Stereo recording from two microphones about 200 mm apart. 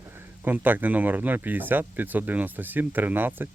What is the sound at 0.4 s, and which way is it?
Speech, 10° right (ahead or behind).